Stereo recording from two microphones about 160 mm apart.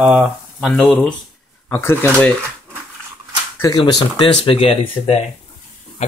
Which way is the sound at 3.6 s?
25° left (ahead or behind).